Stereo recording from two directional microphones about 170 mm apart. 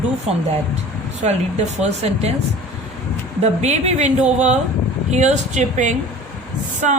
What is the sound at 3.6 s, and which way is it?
A woman's voice, 40° right (ahead or behind).